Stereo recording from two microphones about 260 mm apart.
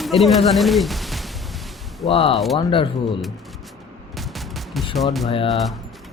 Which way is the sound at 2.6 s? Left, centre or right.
Centre.